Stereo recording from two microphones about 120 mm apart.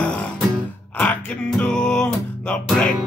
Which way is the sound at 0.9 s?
15° left (ahead or behind).